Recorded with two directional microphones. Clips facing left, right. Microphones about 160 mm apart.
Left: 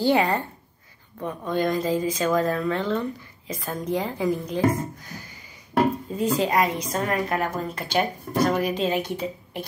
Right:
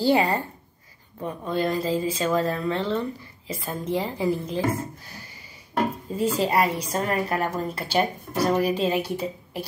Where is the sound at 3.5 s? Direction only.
5° right (ahead or behind).